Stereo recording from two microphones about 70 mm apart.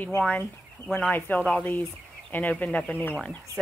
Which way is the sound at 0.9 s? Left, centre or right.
Left.